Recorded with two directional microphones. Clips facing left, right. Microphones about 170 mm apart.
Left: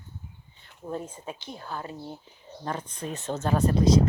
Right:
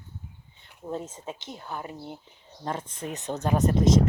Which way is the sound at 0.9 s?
20° right (ahead or behind).